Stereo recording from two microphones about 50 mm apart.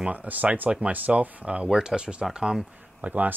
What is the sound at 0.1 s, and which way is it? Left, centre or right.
Speech, right.